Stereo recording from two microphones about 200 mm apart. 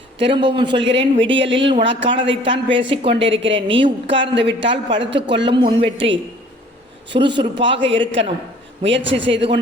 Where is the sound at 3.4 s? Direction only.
65° right (ahead or behind).